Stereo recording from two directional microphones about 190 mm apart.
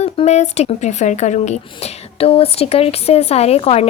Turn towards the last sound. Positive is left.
turn(degrees=35)  # may be behind; listen again after turning